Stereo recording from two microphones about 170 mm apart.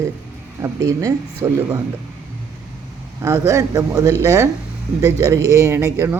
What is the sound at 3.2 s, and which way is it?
A man's voice, 15° right (ahead or behind).